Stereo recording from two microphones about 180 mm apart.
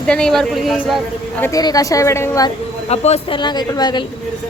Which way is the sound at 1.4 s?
20° left (ahead or behind).